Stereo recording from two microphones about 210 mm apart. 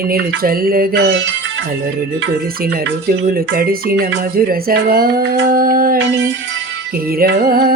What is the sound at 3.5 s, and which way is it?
Music, 45° right (ahead or behind).